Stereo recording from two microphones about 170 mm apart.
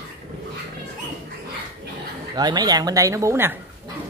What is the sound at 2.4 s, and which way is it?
Speech, 25° right (ahead or behind).